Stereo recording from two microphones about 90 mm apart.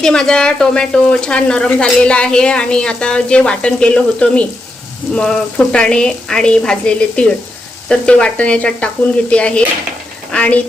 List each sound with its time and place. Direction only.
0.0 s speech: 5° left (ahead or behind)